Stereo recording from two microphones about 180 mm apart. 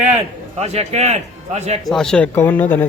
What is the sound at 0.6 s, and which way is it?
A man's voice, 35° right (ahead or behind).